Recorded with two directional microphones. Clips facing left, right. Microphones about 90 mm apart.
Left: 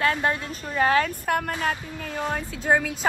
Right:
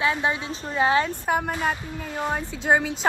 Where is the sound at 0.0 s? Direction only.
10° right (ahead or behind).